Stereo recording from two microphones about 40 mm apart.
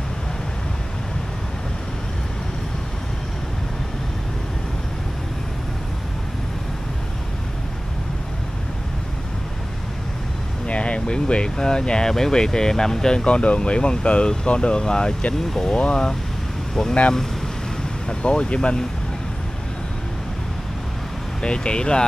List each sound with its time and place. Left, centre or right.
10.7 s speech: left; by 15.7 s centre
15.7 s speech: left
18.0 s speech: left
21.4 s speech: left